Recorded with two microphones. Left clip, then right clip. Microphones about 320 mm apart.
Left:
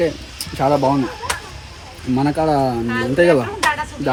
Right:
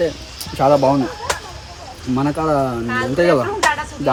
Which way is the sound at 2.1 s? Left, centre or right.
Centre.